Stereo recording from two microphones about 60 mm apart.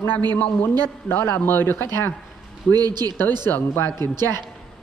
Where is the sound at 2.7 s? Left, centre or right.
Right.